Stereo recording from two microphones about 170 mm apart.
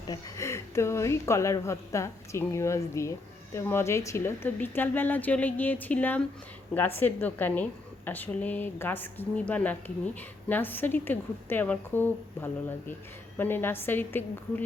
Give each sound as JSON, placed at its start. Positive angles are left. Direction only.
{"t": 0.1, "sound": "speech", "side_deg": 15}